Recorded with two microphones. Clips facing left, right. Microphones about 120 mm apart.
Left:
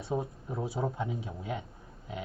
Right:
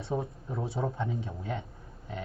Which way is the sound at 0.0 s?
Centre (ahead or behind).